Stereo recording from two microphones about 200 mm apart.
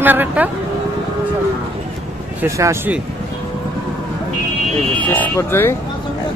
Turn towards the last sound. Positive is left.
turn(degrees=10)  # may be behind; listen again after turning